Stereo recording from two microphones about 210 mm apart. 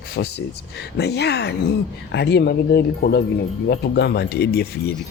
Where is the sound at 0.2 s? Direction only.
50° left (ahead or behind).